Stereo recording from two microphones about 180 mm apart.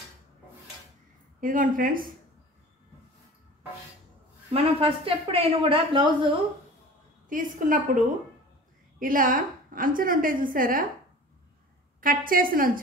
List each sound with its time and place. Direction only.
1.4 s a woman's voice: 50° right (ahead or behind)
4.5 s a woman's voice: 30° right (ahead or behind)
7.2 s a woman's voice: 45° right (ahead or behind)
9.0 s a woman's voice: 50° right (ahead or behind)
12.0 s a woman's voice: 50° right (ahead or behind)